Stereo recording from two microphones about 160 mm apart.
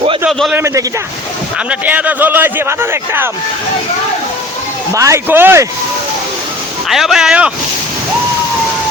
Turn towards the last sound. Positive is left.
turn(degrees=-5)  # may be behind; listen again after turning